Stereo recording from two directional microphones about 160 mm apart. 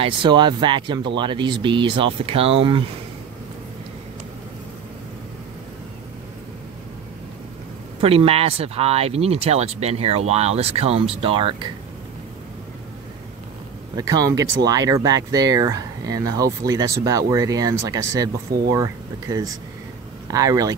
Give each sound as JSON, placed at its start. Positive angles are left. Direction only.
{"t": 0.0, "sound": "speech", "side_deg": -30}
{"t": 8.0, "sound": "speech", "side_deg": -35}
{"t": 13.9, "sound": "speech", "side_deg": -20}